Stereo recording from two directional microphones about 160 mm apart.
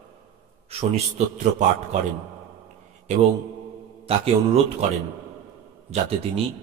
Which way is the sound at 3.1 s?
45° right (ahead or behind).